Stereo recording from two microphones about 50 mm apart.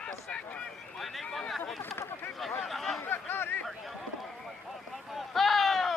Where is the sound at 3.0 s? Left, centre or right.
Left.